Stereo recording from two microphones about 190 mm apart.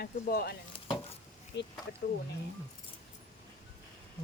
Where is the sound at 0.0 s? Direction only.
50° left (ahead or behind).